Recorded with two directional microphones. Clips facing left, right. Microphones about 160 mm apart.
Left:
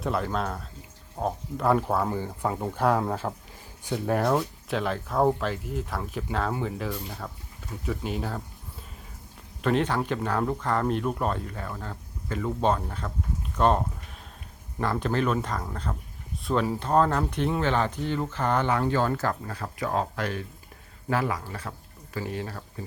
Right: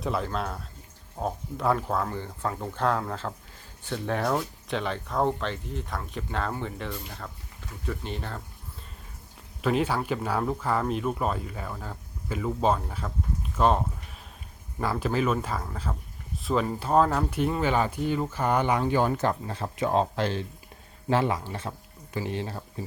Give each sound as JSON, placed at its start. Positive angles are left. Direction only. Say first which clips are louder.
{"t": 0.0, "sound": "speech", "louder": "left 1 dB", "side_deg": 0}
{"t": 9.6, "sound": "speech", "louder": "left 1 dB", "side_deg": -5}